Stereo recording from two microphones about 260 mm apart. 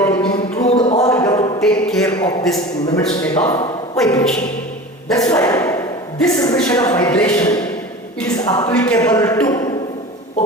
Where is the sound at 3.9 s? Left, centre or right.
Centre.